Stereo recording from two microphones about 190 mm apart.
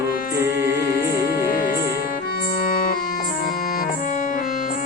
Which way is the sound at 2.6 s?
50° left (ahead or behind).